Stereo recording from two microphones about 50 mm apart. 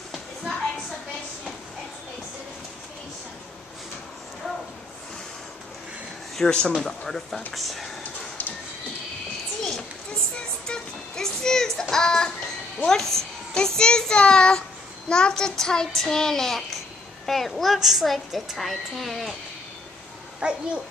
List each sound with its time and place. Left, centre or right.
0.1 s a sound: centre
6.3 s a child's voice: centre
7.5 s a woman's voice: centre
8.0 s a sound: left
10.7 s child singing: centre
12.8 s a child's voice: centre
20.3 s a child's voice: right